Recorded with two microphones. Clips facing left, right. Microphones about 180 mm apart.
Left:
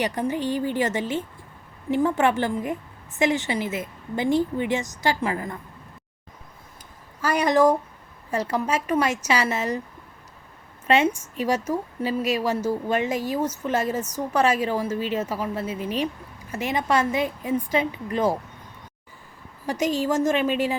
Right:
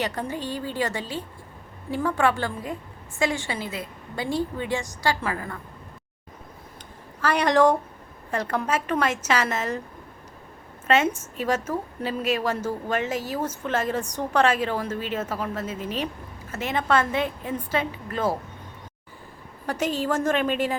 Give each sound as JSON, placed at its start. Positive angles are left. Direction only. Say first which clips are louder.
{"t": 0.0, "sound": "a woman's voice", "louder": "left 4 dB", "side_deg": 15}
{"t": 7.2, "sound": "a woman's voice", "louder": "even", "side_deg": 10}
{"t": 10.8, "sound": "a woman's voice", "louder": "left 1 dB", "side_deg": 15}
{"t": 19.6, "sound": "a woman's voice", "louder": "left 2 dB", "side_deg": 10}